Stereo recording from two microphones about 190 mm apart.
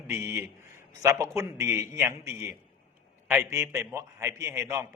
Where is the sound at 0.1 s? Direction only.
15° right (ahead or behind).